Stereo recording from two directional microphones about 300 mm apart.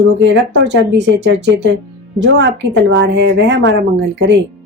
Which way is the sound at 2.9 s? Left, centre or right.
Right.